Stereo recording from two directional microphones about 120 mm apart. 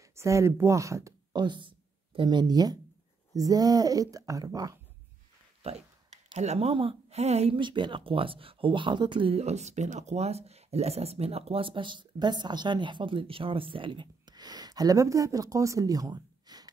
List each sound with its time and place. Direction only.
0.1 s speech: 25° right (ahead or behind)
1.3 s speech: 40° right (ahead or behind)
5.6 s speech: 60° right (ahead or behind)
7.5 s speech: 40° right (ahead or behind)
9.4 s speech: 70° right (ahead or behind); by 16.7 s 35° right (ahead or behind)